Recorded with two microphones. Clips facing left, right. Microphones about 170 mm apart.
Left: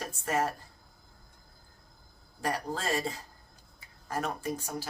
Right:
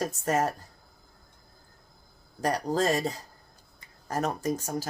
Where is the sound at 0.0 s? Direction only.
40° right (ahead or behind).